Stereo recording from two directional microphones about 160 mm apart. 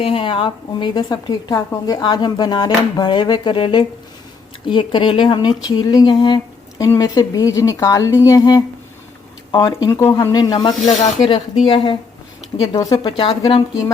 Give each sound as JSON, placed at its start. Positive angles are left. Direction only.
{"t": 0.0, "sound": "a woman's voice", "side_deg": 35}